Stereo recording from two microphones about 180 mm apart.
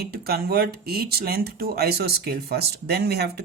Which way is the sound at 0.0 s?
60° right (ahead or behind).